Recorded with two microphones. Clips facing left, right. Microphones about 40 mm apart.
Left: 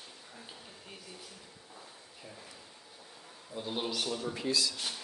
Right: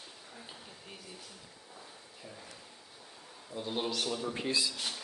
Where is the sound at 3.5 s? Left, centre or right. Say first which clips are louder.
Right 1 dB; centre.